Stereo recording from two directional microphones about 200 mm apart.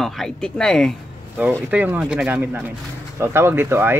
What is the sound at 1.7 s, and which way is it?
Speech, 10° right (ahead or behind).